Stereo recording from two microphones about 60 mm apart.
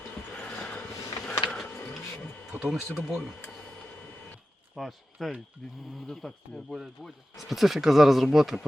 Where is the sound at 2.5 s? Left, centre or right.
Right.